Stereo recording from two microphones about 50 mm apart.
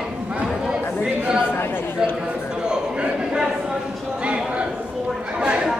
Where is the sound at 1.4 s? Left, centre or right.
Left.